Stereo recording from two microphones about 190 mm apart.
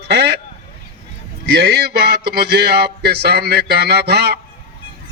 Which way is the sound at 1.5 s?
60° right (ahead or behind).